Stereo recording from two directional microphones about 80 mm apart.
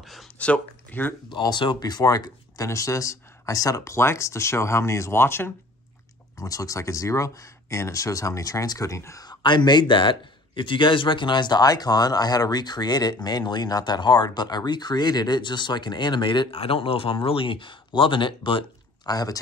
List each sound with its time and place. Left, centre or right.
0.0 s a sound: centre
0.4 s speech: centre
1.5 s speech: left
6.3 s speech: left
9.2 s speech: left
17.1 s speech: left